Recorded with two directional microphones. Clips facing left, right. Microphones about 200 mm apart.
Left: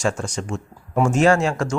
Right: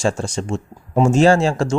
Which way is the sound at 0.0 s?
30° right (ahead or behind).